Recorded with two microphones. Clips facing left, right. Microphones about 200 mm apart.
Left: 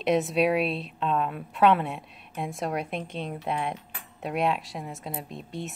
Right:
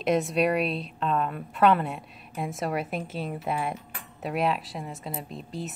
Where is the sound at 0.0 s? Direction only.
Centre (ahead or behind).